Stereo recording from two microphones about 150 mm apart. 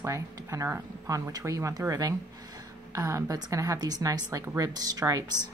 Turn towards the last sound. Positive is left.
turn(degrees=-25)  # may be behind; listen again after turning